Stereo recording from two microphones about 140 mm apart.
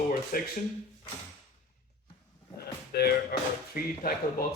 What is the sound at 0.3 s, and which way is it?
Speech, 90° left.